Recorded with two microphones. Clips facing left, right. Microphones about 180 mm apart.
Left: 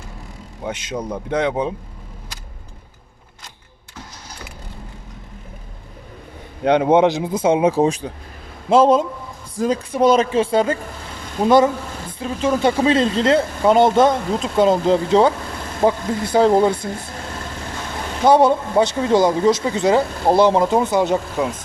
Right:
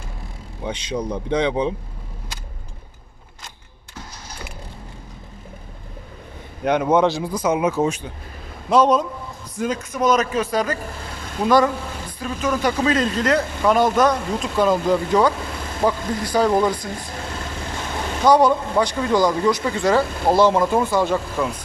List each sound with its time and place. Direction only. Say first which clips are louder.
0.6 s speech: even; 5° left (ahead or behind)
6.7 s speech: left 3 dB; 30° left (ahead or behind)
18.3 s speech: left 2 dB; 25° left (ahead or behind)